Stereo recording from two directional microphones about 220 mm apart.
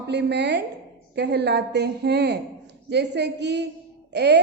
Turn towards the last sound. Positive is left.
turn(degrees=-50)  # may be behind; listen again after turning